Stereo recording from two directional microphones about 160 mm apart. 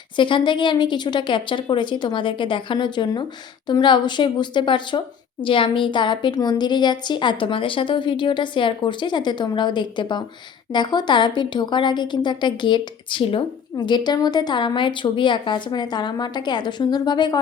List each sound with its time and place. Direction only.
0.2 s a woman's voice: 30° left (ahead or behind)